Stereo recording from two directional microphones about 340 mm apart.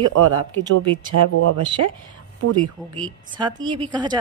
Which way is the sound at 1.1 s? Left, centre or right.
Right.